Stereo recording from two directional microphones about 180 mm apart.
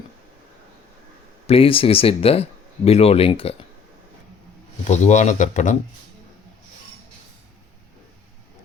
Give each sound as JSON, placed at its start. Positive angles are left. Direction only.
{"t": 1.5, "sound": "speech", "side_deg": 30}
{"t": 4.9, "sound": "speech", "side_deg": 40}